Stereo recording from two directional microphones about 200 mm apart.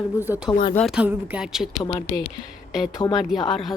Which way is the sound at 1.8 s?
35° left (ahead or behind).